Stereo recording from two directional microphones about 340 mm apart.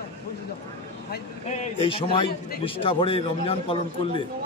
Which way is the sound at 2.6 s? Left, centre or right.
Centre.